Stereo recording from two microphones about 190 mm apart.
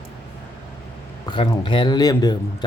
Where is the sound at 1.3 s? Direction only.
25° left (ahead or behind).